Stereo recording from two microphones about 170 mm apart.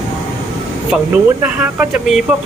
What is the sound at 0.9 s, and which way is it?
A man's voice, 5° right (ahead or behind).